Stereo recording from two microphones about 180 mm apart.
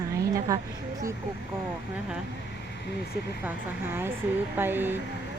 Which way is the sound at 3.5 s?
10° right (ahead or behind).